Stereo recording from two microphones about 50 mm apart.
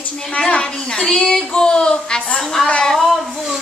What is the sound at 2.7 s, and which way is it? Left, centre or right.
Speech, centre.